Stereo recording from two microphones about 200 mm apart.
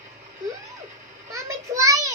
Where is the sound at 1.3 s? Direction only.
15° right (ahead or behind).